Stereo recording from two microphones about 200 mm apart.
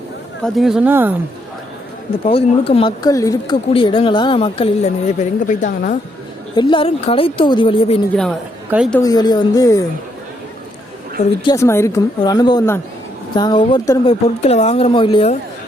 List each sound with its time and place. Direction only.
0.4 s speech: centre (ahead or behind)
2.2 s speech: 30° left (ahead or behind)
6.6 s speech: 25° left (ahead or behind)
8.1 s speech: 5° left (ahead or behind)
9.0 s a woman's voice: 20° left (ahead or behind)
11.4 s a woman's voice: 15° left (ahead or behind)
14.0 s speech: 30° left (ahead or behind)